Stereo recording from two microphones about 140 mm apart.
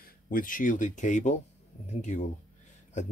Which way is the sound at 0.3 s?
80° left.